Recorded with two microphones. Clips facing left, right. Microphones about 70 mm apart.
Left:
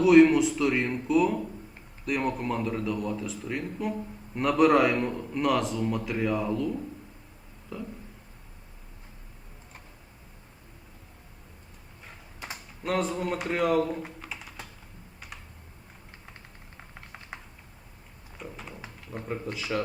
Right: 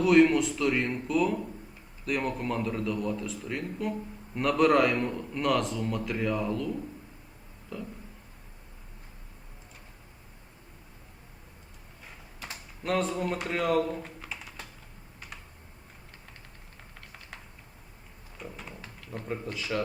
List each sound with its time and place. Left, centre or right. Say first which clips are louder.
0.0 s a man's voice: left 3 dB; centre
7.7 s a sound: left 1 dB; centre
12.8 s a man's voice: even; centre
14.2 s typing: left 1 dB; centre
17.3 s typing: left 4 dB; left
18.3 s a sound: left 1 dB; centre
19.1 s a man's voice: left 1 dB; centre